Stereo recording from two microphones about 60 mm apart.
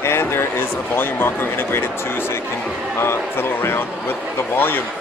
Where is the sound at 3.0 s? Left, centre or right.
Left.